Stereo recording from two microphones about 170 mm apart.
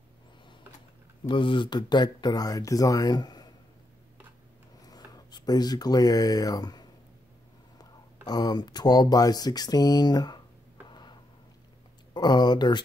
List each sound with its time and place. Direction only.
1.2 s speech: 30° left (ahead or behind)
4.7 s speech: 20° left (ahead or behind)
10.9 s a sound: 25° left (ahead or behind)
12.1 s speech: 25° left (ahead or behind)